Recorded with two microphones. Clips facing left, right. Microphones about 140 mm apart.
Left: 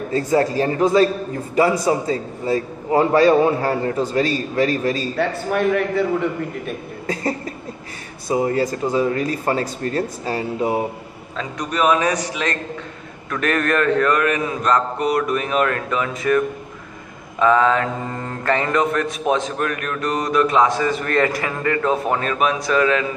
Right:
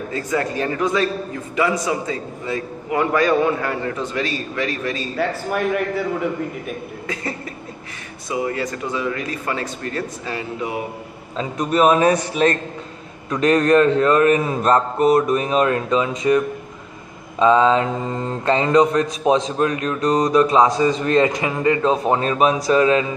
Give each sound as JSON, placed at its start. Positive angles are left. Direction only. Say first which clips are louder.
{"t": 0.1, "sound": "a man's voice", "louder": "left 5 dB", "side_deg": 35}
{"t": 5.1, "sound": "a man's voice", "louder": "left 1 dB", "side_deg": 0}
{"t": 8.3, "sound": "a man's voice", "louder": "left 4 dB", "side_deg": 35}
{"t": 11.3, "sound": "speech", "louder": "right 5 dB", "side_deg": -25}
{"t": 13.3, "sound": "speech", "louder": "right 5 dB", "side_deg": -20}